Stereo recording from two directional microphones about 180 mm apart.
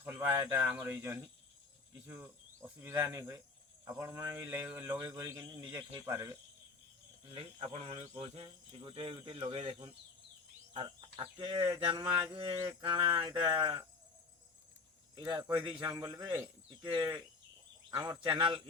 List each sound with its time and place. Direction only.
0.0 s speech: 10° right (ahead or behind)
2.6 s speech: 10° right (ahead or behind)
7.3 s speech: 35° right (ahead or behind)
15.1 s speech: 25° right (ahead or behind)